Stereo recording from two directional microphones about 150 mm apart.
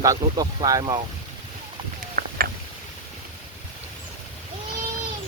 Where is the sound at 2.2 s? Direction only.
65° right (ahead or behind).